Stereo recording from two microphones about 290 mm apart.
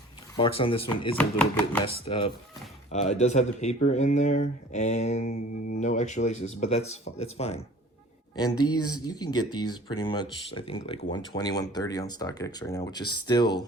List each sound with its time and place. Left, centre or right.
0.3 s speech: centre
1.1 s speech: centre
2.0 s speech: centre